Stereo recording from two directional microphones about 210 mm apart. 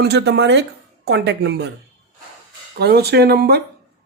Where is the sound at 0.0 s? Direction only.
50° right (ahead or behind).